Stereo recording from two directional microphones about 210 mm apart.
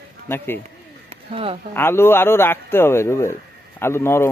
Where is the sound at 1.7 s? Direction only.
10° left (ahead or behind).